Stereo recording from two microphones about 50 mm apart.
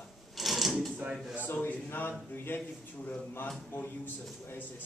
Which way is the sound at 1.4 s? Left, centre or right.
Left.